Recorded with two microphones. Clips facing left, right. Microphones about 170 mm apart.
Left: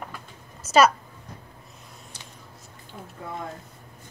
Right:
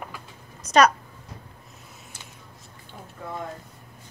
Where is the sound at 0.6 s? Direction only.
5° left (ahead or behind).